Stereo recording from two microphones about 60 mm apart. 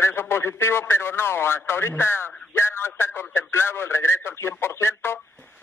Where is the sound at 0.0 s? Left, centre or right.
Left.